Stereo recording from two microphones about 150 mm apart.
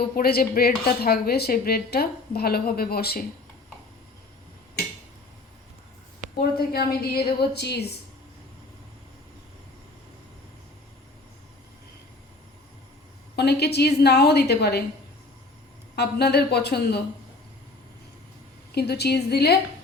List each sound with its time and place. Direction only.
0.2 s a woman's voice: 90° left
6.4 s a woman's voice: 90° left
13.3 s a woman's voice: 90° left
16.0 s a woman's voice: 90° left
18.7 s a woman's voice: 90° left